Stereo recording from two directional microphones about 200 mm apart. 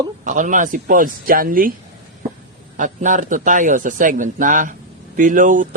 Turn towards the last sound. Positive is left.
turn(degrees=-40)  # may be behind; listen again after turning